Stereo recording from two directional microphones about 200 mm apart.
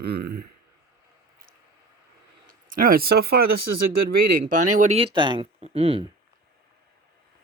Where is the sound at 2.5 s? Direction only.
45° right (ahead or behind).